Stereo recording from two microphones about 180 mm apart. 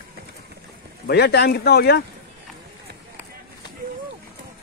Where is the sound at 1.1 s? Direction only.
65° left (ahead or behind).